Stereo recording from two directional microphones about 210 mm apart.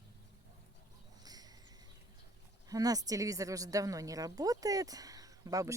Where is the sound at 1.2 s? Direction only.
20° right (ahead or behind).